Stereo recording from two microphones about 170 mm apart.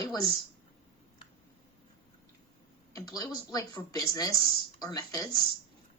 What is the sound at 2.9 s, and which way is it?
Speech, 20° left (ahead or behind).